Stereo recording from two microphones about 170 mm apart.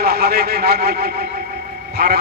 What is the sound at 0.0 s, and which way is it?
Speech, 65° right (ahead or behind).